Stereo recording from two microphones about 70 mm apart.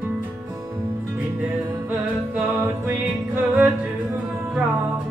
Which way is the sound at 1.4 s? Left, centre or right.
Right.